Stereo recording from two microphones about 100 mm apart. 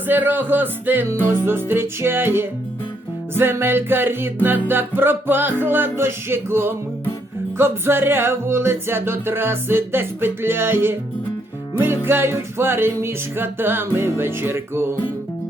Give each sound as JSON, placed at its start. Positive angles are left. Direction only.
{"t": 0.1, "sound": "music", "side_deg": -20}